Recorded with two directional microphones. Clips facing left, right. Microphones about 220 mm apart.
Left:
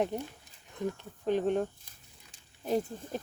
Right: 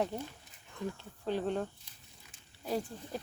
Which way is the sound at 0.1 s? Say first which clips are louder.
Left 4 dB; 20° left (ahead or behind).